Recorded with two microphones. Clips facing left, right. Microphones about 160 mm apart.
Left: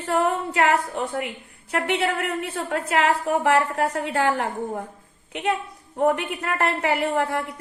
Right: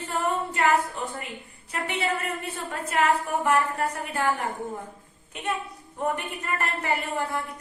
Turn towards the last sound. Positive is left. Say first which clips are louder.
# left 5 dB
turn(degrees=70)  # may be behind; listen again after turning